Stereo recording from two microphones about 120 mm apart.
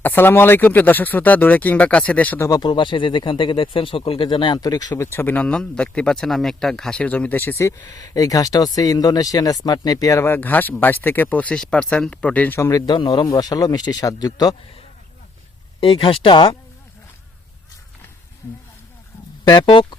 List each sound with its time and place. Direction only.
0.0 s speech: 15° left (ahead or behind)
2.4 s speech: 35° left (ahead or behind)
5.1 s speech: 15° left (ahead or behind)
12.8 s speech: 35° left (ahead or behind)
15.8 s speech: 50° left (ahead or behind)
19.5 s speech: 35° left (ahead or behind)
19.7 s speech: 45° left (ahead or behind)